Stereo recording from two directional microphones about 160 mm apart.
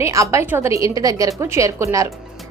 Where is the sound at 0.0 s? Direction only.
20° right (ahead or behind).